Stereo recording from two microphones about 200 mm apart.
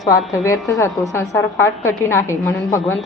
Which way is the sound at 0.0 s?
15° left (ahead or behind).